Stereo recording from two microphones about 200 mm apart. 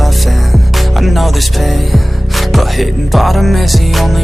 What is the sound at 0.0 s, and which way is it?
Music, centre (ahead or behind).